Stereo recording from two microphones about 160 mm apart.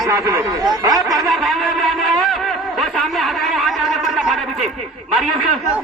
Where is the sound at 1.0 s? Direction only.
Centre (ahead or behind).